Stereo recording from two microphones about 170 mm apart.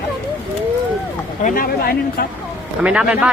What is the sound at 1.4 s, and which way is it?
Speech, 55° left (ahead or behind).